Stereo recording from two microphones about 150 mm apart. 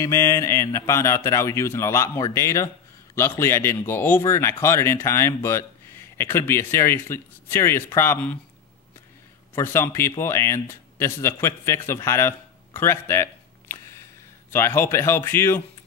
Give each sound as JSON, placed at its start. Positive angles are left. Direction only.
{"t": 0.0, "sound": "speech", "side_deg": 20}
{"t": 9.6, "sound": "speech", "side_deg": 15}